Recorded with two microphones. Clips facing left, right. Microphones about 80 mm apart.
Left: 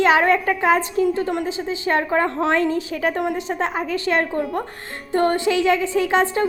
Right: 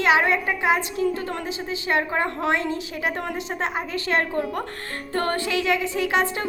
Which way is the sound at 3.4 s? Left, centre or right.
Left.